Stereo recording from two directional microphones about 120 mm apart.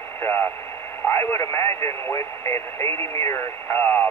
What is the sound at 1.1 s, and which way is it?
Speech, 20° left (ahead or behind).